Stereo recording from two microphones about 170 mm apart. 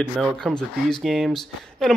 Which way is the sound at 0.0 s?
Centre (ahead or behind).